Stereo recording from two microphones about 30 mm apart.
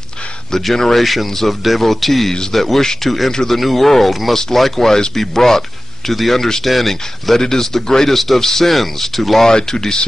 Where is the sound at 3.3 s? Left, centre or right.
Centre.